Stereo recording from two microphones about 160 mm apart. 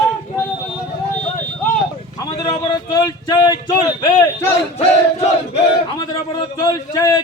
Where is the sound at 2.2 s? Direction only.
25° left (ahead or behind).